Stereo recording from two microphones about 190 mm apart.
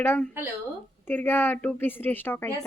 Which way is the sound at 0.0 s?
10° left (ahead or behind).